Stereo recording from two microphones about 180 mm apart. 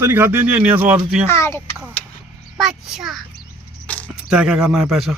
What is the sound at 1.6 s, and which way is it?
Speech, 10° right (ahead or behind).